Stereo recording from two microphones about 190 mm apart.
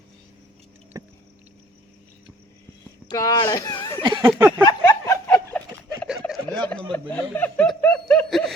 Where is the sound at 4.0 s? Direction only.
25° right (ahead or behind).